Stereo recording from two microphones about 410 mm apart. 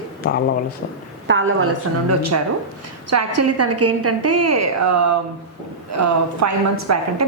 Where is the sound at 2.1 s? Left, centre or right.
Right.